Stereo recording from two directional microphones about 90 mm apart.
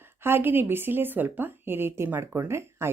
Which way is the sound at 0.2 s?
25° right (ahead or behind).